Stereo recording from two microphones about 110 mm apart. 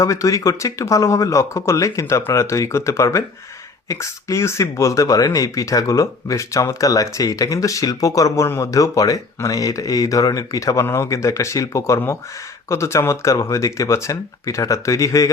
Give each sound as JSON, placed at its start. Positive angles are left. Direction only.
{"t": 0.0, "sound": "speech", "side_deg": 30}